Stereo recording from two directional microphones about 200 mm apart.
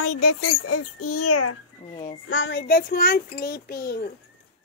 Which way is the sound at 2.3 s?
65° left (ahead or behind).